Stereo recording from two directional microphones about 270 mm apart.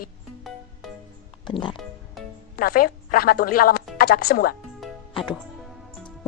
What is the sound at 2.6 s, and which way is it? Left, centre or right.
A woman's voice, left.